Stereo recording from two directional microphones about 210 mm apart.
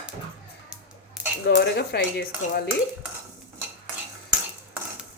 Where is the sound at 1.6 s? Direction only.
50° left (ahead or behind).